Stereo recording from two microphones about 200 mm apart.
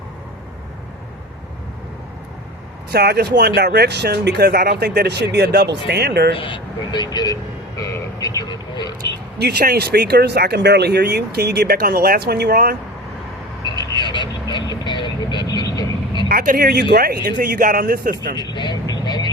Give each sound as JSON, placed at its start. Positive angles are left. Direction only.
{"t": 2.9, "sound": "speech", "side_deg": -55}
{"t": 6.3, "sound": "speech", "side_deg": 25}
{"t": 9.4, "sound": "speech", "side_deg": -50}
{"t": 13.9, "sound": "vehicle", "side_deg": 20}
{"t": 16.3, "sound": "speech", "side_deg": -45}
{"t": 18.3, "sound": "vehicle", "side_deg": 20}